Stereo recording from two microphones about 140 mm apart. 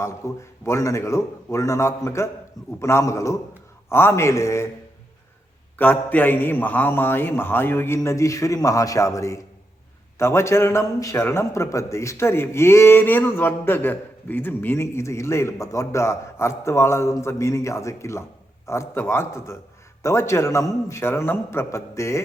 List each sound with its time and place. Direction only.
0.2 s a man's voice: 20° left (ahead or behind)
5.7 s a man's voice: 10° left (ahead or behind)